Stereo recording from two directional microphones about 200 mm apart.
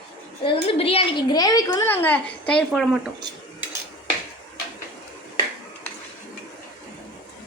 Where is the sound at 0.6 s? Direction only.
30° left (ahead or behind); by 3.0 s centre (ahead or behind).